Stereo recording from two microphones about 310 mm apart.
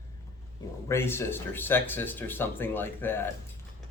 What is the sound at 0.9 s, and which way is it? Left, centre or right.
Speech, centre.